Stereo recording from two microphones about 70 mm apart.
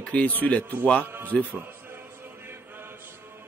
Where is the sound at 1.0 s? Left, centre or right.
Right.